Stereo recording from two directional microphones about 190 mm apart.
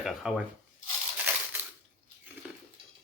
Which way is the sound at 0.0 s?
Centre (ahead or behind).